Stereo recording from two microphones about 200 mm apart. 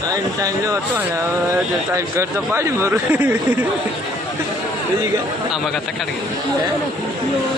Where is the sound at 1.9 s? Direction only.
15° right (ahead or behind).